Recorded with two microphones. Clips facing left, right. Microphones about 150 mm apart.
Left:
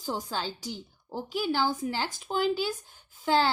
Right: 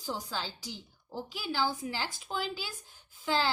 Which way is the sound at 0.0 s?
50° left (ahead or behind).